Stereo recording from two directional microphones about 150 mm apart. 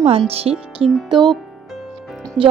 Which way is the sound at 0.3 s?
40° right (ahead or behind).